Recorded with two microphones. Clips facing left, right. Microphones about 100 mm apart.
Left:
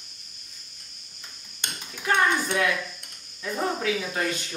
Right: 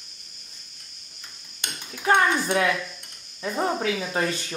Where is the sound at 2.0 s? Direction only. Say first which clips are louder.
Right 3 dB; 30° right (ahead or behind).